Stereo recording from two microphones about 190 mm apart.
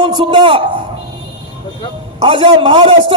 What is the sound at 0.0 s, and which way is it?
Speech, 25° right (ahead or behind).